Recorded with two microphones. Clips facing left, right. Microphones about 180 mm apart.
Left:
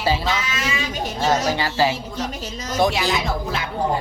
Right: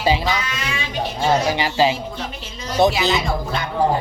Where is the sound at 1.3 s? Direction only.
15° right (ahead or behind).